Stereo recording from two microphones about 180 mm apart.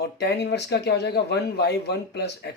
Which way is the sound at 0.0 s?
65° left (ahead or behind).